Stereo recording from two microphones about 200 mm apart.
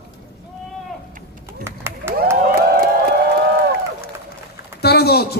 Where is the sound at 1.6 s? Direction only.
10° right (ahead or behind).